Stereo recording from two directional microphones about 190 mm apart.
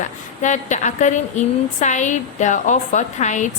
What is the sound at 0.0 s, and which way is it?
A woman's voice, 40° left (ahead or behind).